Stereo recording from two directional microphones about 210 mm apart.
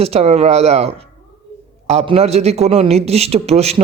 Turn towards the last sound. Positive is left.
turn(degrees=-30)  # may be behind; listen again after turning